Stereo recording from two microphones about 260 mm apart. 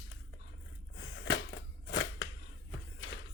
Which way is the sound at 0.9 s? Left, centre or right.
Left.